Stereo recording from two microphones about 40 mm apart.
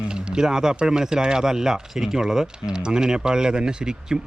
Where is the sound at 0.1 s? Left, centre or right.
Right.